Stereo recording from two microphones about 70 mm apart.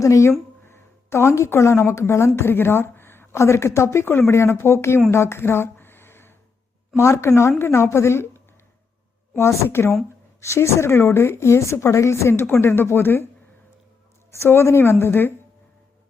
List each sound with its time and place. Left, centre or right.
0.0 s a woman's voice: left
5.1 s a sound: left
6.9 s a woman's voice: left
14.3 s speech: left